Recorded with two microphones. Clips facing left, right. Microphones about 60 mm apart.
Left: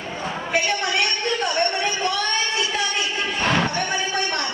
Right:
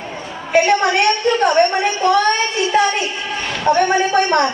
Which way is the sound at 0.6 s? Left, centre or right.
Right.